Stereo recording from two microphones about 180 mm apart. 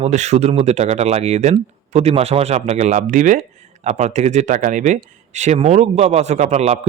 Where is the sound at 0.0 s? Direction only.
40° right (ahead or behind).